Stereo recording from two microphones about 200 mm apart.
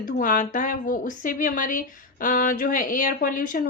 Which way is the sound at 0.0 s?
40° left (ahead or behind).